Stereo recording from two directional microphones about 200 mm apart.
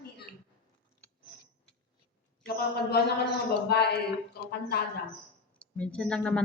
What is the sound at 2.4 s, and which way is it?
A man's voice, 50° left (ahead or behind).